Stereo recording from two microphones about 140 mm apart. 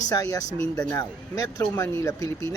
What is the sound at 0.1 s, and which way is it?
Speech, 25° left (ahead or behind).